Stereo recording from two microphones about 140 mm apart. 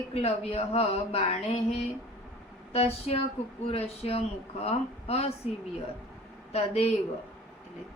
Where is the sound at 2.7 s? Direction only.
45° left (ahead or behind).